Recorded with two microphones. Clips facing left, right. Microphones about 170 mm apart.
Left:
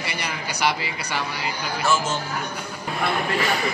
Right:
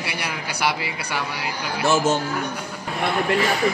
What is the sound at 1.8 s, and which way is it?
Speech, 55° right (ahead or behind).